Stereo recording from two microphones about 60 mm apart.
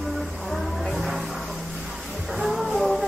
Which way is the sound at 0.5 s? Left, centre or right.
Centre.